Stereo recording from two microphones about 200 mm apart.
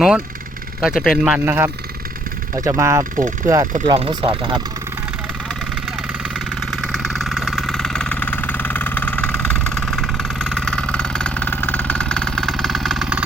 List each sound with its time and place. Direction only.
0.8 s speech: centre (ahead or behind); by 4.5 s 20° right (ahead or behind)
6.7 s vehicle: centre (ahead or behind)